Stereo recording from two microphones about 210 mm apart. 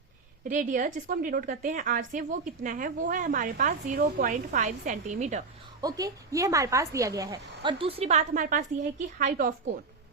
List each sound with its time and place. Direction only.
0.4 s a woman's voice: 35° right (ahead or behind)
5.8 s a woman's voice: 15° right (ahead or behind); by 9.5 s 40° right (ahead or behind)